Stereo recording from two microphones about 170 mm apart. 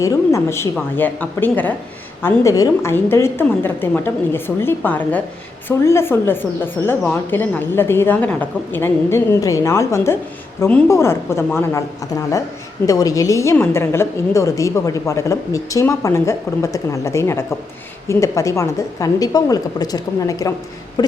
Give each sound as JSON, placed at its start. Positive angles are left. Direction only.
{"t": 0.0, "sound": "a woman's voice", "side_deg": 15}
{"t": 12.8, "sound": "a woman's voice", "side_deg": 20}